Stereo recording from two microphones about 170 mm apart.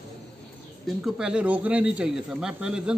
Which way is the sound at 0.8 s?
5° right (ahead or behind).